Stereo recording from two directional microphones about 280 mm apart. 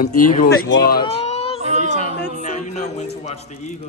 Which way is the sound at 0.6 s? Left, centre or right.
Left.